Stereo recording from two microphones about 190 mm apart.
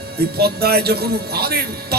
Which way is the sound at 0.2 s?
55° right (ahead or behind).